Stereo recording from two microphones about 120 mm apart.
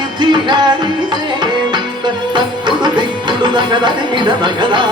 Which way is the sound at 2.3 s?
40° right (ahead or behind).